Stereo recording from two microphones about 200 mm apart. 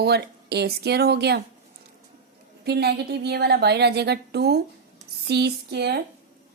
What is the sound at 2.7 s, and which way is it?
A woman's voice, 55° right (ahead or behind).